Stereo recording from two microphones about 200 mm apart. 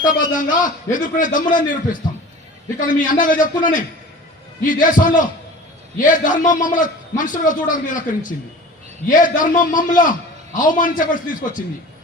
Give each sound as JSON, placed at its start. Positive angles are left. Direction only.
{"t": 0.3, "sound": "a man's voice", "side_deg": 40}